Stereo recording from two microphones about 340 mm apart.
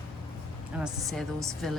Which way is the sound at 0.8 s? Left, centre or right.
Centre.